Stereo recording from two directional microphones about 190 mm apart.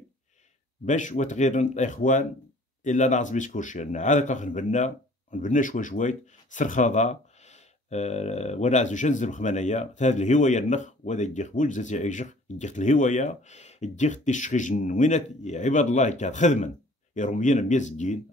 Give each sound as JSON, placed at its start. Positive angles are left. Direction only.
{"t": 0.8, "sound": "speech", "side_deg": 40}